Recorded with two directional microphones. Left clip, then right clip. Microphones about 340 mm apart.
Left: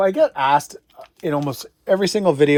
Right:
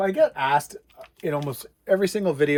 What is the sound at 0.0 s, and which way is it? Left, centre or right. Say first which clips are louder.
Speech: left 4 dB; centre.